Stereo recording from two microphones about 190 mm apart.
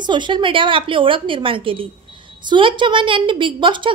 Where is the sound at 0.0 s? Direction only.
25° right (ahead or behind).